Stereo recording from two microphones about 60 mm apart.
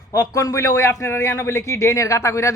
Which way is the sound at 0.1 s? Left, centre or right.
Left.